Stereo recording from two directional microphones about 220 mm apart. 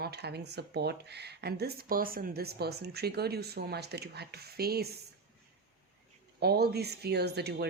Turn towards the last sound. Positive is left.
turn(degrees=-50)  # may be behind; listen again after turning